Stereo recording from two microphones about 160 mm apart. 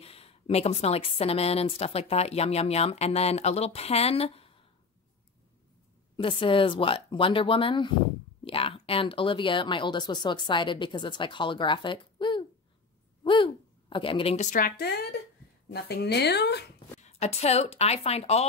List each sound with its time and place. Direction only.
0.0 s a woman's voice: 40° left (ahead or behind)
6.1 s a woman's voice: 35° left (ahead or behind)
13.2 s a sound: 30° left (ahead or behind)
14.5 s speech: 70° left (ahead or behind)
15.7 s speech: 90° left
17.0 s a woman's voice: 40° left (ahead or behind)